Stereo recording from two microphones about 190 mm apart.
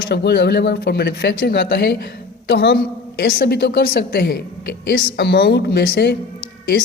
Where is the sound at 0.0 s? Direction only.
55° left (ahead or behind).